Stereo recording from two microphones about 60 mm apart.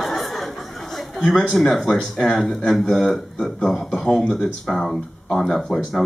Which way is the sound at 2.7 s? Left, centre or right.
Centre.